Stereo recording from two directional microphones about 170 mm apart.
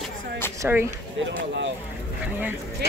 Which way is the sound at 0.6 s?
15° right (ahead or behind).